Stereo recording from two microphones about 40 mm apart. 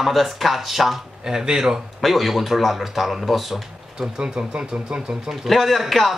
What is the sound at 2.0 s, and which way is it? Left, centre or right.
Speech, centre.